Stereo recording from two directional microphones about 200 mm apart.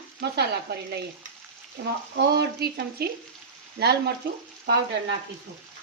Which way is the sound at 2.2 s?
55° right (ahead or behind).